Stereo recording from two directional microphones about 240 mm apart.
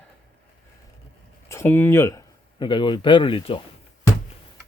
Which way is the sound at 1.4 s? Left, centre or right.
Centre.